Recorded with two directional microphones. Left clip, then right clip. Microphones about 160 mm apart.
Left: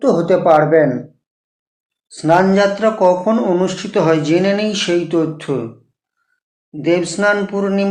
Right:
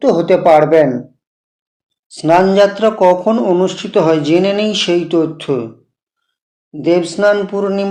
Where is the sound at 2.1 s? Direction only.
30° right (ahead or behind).